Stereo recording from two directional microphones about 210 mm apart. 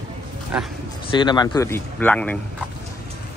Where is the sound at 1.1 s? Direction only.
20° left (ahead or behind); by 2.4 s 5° left (ahead or behind).